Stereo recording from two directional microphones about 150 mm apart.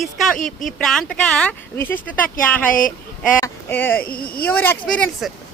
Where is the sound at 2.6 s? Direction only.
65° left (ahead or behind).